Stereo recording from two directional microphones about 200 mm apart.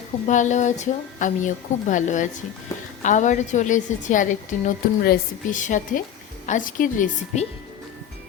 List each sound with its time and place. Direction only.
0.3 s a woman's voice: 35° left (ahead or behind)